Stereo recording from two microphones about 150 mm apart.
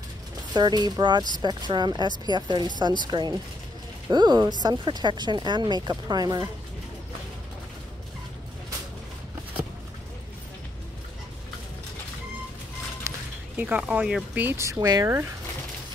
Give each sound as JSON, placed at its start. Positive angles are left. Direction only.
{"t": 0.6, "sound": "speech", "side_deg": -25}
{"t": 13.0, "sound": "a sound", "side_deg": -20}
{"t": 13.6, "sound": "speech", "side_deg": -10}